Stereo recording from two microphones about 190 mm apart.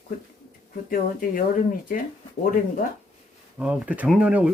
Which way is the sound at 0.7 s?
50° left (ahead or behind).